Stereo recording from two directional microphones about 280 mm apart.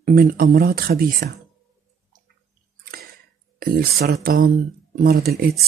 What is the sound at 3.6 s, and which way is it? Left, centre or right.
Speech, right.